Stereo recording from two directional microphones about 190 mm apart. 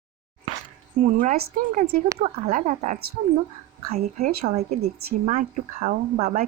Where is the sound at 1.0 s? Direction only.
45° right (ahead or behind).